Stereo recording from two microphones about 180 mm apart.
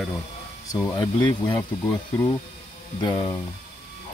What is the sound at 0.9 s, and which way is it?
Speech, 25° left (ahead or behind).